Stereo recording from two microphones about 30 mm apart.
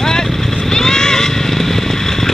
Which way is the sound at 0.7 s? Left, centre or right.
Centre.